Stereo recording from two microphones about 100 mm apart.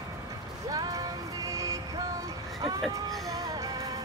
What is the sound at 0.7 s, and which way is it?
Music, 40° right (ahead or behind).